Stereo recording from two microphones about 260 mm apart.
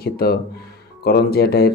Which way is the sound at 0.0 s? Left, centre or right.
Left.